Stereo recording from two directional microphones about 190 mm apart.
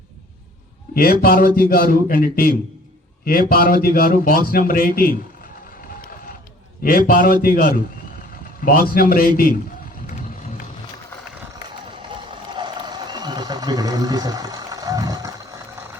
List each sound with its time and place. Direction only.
0.9 s a man's voice: 50° left (ahead or behind)
6.0 s vehicle: 50° left (ahead or behind)
6.8 s a man's voice: 45° left (ahead or behind)
12.1 s a sound: 25° right (ahead or behind)